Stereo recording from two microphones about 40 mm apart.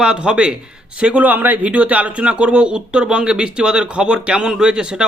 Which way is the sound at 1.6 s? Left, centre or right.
Right.